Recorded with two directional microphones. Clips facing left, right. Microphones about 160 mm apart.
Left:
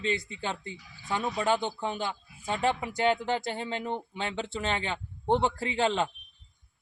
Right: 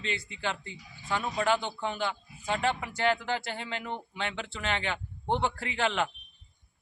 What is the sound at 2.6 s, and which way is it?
A man's voice, 20° left (ahead or behind).